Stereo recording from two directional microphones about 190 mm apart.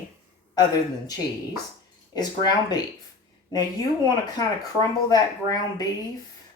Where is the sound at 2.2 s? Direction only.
20° left (ahead or behind).